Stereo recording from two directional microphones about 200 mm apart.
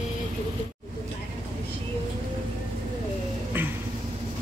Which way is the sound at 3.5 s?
10° right (ahead or behind).